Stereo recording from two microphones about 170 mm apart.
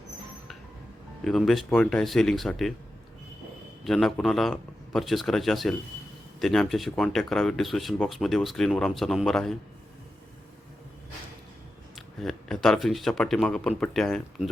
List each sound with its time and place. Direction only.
1.2 s speech: centre (ahead or behind)
3.8 s speech: centre (ahead or behind)
11.9 s speech: centre (ahead or behind)